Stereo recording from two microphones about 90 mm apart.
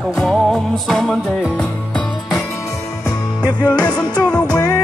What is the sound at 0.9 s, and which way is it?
Music, 5° left (ahead or behind).